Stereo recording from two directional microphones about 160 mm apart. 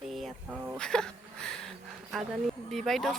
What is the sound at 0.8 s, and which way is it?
Speech, 5° left (ahead or behind).